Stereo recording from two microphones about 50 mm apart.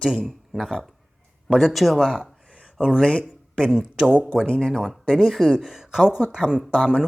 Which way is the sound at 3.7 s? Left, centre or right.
Centre.